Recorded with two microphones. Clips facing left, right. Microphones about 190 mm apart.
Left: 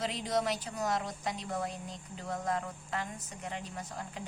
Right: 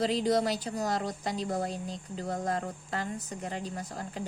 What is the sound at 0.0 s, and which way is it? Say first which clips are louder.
Speech: right 6 dB; 35° right (ahead or behind).